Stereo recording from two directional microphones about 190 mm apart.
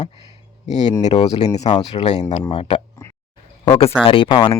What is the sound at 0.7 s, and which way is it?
Speech, 40° left (ahead or behind).